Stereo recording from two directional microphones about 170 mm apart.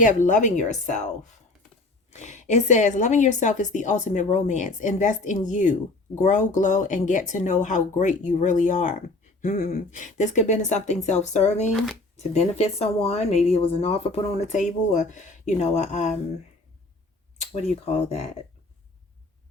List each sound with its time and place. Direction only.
0.0 s a woman's voice: 50° left (ahead or behind)
2.0 s a woman's voice: 45° left (ahead or behind)
11.7 s speech: centre (ahead or behind)
12.3 s a woman's voice: 40° left (ahead or behind)
17.4 s speech: 40° left (ahead or behind)